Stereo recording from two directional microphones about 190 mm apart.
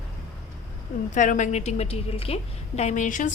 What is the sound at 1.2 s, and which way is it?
A woman's voice, 40° left (ahead or behind).